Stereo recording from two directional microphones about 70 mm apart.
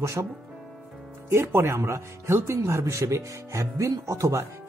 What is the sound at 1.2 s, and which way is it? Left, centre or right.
A man's voice, right.